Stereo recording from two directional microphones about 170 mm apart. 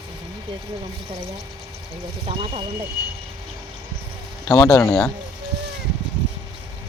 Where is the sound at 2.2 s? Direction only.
35° right (ahead or behind).